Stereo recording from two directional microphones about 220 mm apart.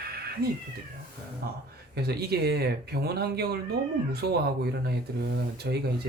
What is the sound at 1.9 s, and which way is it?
Speech, 45° right (ahead or behind).